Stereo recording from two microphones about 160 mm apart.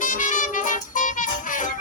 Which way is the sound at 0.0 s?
55° left (ahead or behind).